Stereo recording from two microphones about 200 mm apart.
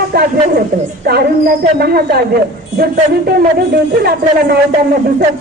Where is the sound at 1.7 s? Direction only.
50° right (ahead or behind).